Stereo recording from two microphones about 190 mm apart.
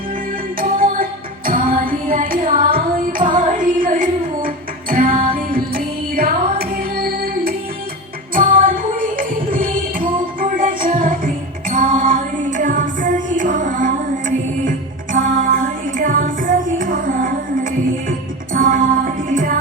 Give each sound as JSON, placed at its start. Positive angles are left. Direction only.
{"t": 0.6, "sound": "music", "side_deg": -50}